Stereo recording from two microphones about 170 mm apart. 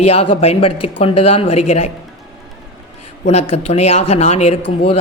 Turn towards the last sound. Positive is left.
turn(degrees=35)  # may be behind; listen again after turning